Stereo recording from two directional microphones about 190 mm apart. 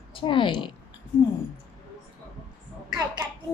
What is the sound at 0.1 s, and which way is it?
Speech, 25° left (ahead or behind).